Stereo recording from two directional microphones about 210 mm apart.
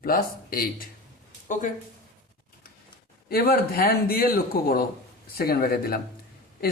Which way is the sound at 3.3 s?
45° left (ahead or behind).